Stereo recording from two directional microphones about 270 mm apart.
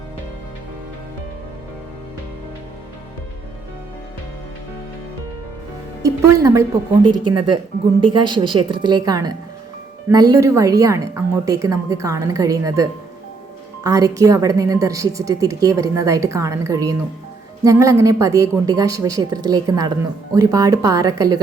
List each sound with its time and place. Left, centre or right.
6.0 s a woman's voice: centre